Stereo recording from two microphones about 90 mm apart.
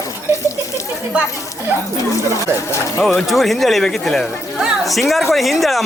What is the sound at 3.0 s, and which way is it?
Speech, centre (ahead or behind).